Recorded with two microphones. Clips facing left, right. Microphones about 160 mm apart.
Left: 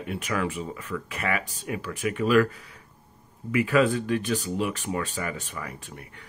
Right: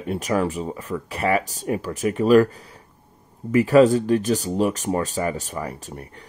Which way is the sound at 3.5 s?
40° right (ahead or behind).